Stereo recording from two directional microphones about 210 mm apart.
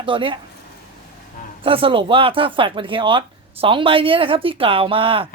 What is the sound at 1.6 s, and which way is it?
Speech, 25° right (ahead or behind).